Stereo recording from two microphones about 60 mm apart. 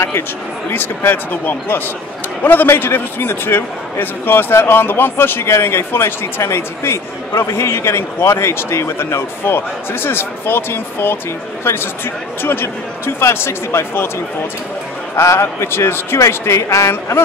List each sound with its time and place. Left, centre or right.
0.7 s a man's voice: left
15.1 s a man's voice: left